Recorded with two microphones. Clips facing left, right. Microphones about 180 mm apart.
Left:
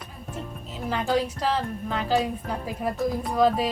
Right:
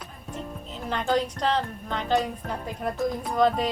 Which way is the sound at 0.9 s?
5° left (ahead or behind).